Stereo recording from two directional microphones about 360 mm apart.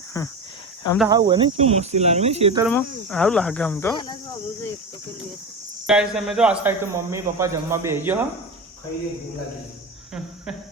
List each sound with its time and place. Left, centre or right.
0.1 s speech: centre
0.9 s cricket: centre
2.6 s a man's voice: centre
5.8 s a man's voice: centre